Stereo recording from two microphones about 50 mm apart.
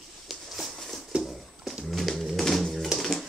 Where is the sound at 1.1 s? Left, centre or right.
Centre.